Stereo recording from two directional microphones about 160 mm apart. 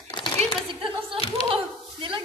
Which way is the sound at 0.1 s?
30° left (ahead or behind).